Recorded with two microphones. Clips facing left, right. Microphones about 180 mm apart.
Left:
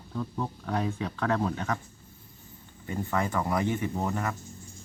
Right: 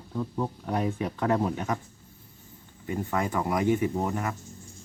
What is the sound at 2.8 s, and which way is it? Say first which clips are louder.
Speech: right 1 dB; 15° right (ahead or behind).